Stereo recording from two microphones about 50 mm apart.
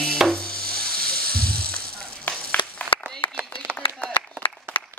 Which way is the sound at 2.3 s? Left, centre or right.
Left.